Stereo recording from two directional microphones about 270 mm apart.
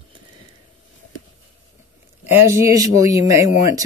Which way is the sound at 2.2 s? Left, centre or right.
Centre.